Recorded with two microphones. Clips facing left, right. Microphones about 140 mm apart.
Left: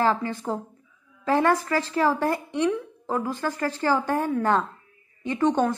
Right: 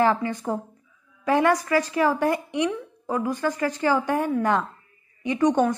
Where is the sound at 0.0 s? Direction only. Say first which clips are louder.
Right 2 dB; 15° right (ahead or behind).